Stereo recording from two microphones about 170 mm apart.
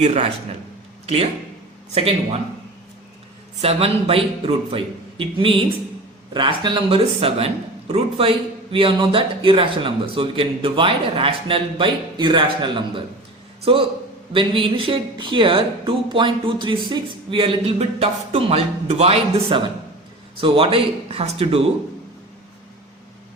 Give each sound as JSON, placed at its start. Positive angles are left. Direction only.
{"t": 0.0, "sound": "speech", "side_deg": -40}
{"t": 3.6, "sound": "speech", "side_deg": -35}